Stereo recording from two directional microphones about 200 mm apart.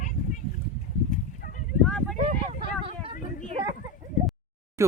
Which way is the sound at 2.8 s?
25° right (ahead or behind).